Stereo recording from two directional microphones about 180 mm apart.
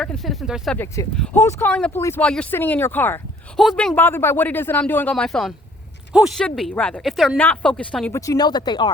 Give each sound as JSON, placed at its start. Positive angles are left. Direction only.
{"t": 0.0, "sound": "speech", "side_deg": 0}
{"t": 0.8, "sound": "speech", "side_deg": 10}
{"t": 8.2, "sound": "speech", "side_deg": 20}